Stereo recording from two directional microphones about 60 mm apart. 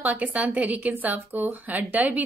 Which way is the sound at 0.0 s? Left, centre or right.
Right.